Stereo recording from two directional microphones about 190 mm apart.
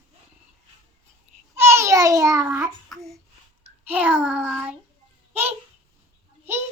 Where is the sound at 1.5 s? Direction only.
15° right (ahead or behind).